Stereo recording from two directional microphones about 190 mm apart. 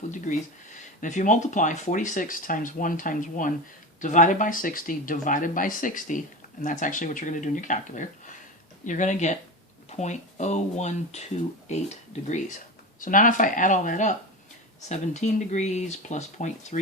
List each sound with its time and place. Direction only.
1.0 s speech: 40° left (ahead or behind)